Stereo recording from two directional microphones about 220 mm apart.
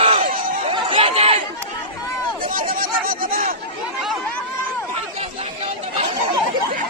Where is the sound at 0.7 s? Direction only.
25° right (ahead or behind).